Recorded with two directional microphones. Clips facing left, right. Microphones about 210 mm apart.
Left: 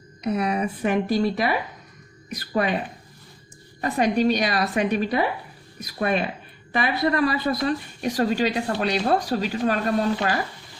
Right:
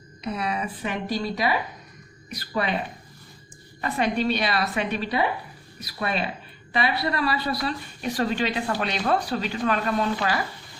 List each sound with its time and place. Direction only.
0.3 s a woman's voice: 45° left (ahead or behind)
3.8 s a woman's voice: 40° left (ahead or behind)